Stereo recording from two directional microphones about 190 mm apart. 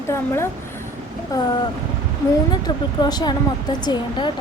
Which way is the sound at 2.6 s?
20° left (ahead or behind).